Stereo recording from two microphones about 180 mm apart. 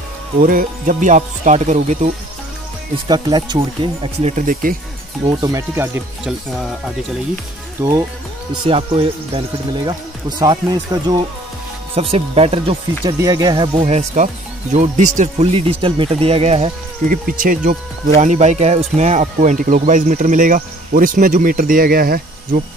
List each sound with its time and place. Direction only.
0.4 s speech: 50° right (ahead or behind)
3.1 s speech: 25° right (ahead or behind); by 4.7 s 50° right (ahead or behind)
5.3 s speech: 20° right (ahead or behind)
7.8 s speech: 15° right (ahead or behind)
8.6 s speech: 30° right (ahead or behind)
10.4 s speech: 20° right (ahead or behind)
11.9 s speech: 35° right (ahead or behind)
13.2 s speech: 20° right (ahead or behind); by 15.6 s 40° right (ahead or behind)
15.8 s speech: 30° right (ahead or behind)
17.1 s speech: 50° right (ahead or behind)